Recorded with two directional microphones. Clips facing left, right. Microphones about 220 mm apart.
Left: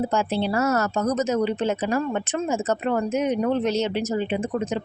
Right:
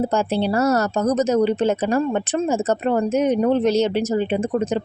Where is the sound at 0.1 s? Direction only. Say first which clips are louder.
Right 3 dB; 40° right (ahead or behind).